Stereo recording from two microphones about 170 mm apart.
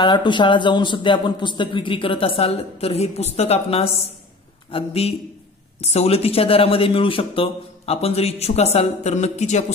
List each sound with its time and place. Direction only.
0.0 s speech: 25° left (ahead or behind)